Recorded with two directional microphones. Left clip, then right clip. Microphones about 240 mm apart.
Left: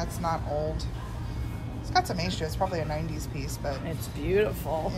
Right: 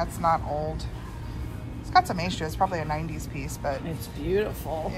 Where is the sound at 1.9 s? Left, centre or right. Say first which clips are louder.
Right 5 dB; centre.